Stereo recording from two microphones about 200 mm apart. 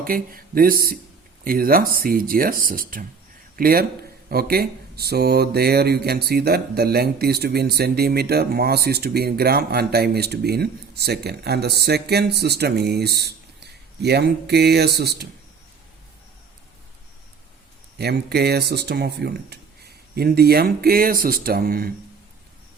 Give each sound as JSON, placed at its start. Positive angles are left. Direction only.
{"t": 0.0, "sound": "a man's voice", "side_deg": -45}
{"t": 17.9, "sound": "speech", "side_deg": -55}